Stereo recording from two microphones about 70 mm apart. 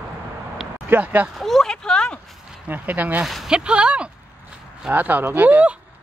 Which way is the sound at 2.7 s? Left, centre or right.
Right.